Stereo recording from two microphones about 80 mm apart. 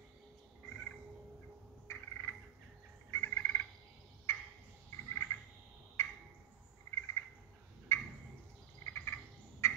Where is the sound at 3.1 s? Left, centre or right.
Left.